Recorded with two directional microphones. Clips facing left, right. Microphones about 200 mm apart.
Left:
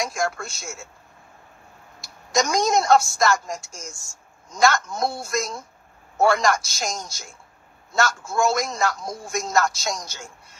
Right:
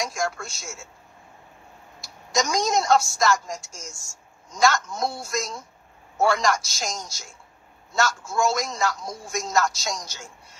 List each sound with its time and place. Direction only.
0.0 s a man's voice: 55° left (ahead or behind)
2.0 s a woman's voice: 55° left (ahead or behind)